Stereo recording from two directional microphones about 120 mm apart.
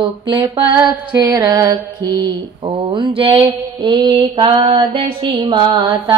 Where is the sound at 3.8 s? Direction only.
40° right (ahead or behind).